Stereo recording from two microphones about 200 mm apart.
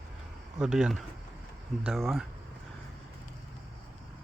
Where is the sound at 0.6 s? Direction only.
5° right (ahead or behind).